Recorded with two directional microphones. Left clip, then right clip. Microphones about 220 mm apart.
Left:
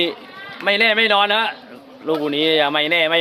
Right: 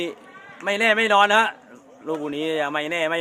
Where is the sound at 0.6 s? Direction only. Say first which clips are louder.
Left 4 dB; 5° right (ahead or behind).